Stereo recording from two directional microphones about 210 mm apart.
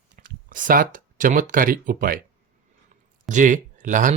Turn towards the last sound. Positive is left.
turn(degrees=-35)  # may be behind; listen again after turning